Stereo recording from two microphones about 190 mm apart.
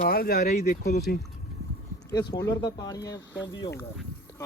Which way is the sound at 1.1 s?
55° left (ahead or behind).